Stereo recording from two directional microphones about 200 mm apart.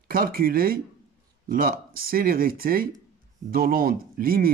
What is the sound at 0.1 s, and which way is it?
Speech, 45° right (ahead or behind).